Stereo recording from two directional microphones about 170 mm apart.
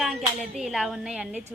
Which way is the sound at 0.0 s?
Centre (ahead or behind).